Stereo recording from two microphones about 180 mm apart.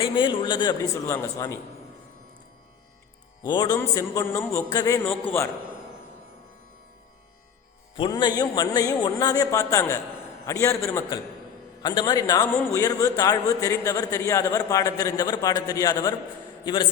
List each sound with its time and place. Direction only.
0.0 s a man's voice: 25° left (ahead or behind)
3.4 s a man's voice: 20° left (ahead or behind)
7.9 s a man's voice: 25° left (ahead or behind)